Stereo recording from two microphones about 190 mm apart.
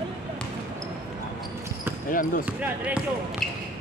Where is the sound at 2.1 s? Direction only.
45° left (ahead or behind).